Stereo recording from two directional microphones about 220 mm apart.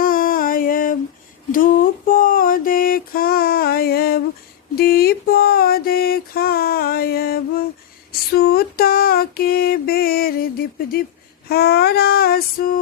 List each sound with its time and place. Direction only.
0.0 s music: 40° left (ahead or behind)
1.5 s mantra: 40° left (ahead or behind)
8.1 s a sound: 45° left (ahead or behind)
11.4 s female singing: 45° left (ahead or behind)